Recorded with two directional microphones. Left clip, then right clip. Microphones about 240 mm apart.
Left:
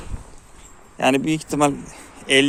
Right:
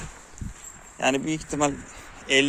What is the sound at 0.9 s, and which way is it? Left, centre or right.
A man's voice, centre.